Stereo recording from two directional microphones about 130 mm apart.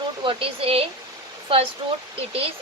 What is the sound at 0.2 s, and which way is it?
Speech, 45° right (ahead or behind).